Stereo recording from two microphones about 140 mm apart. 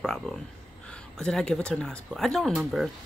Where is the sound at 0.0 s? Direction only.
5° left (ahead or behind).